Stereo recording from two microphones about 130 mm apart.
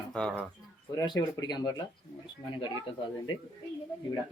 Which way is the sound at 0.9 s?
30° left (ahead or behind).